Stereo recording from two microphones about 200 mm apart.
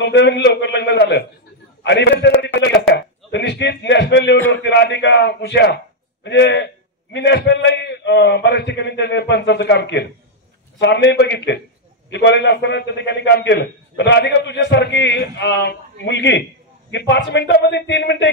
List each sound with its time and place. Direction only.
0.0 s a man's voice: 60° left (ahead or behind)
1.8 s a sound: 60° left (ahead or behind)
4.5 s a man's voice: 60° left (ahead or behind)